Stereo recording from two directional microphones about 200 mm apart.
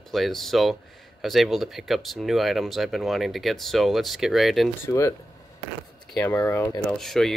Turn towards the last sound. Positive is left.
turn(degrees=0)  # may be behind; listen again after turning